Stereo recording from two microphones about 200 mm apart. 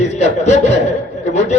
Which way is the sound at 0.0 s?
35° left (ahead or behind).